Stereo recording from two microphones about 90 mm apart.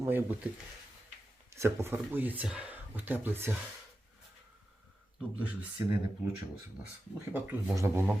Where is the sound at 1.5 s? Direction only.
30° right (ahead or behind).